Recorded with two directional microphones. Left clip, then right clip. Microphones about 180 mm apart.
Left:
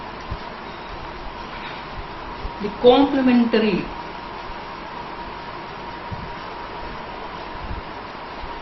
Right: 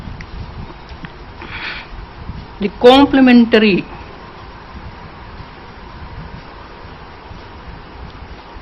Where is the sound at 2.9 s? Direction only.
45° right (ahead or behind).